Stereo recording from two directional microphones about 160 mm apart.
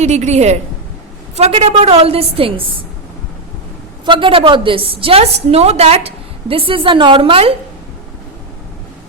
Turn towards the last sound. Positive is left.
turn(degrees=-35)  # may be behind; listen again after turning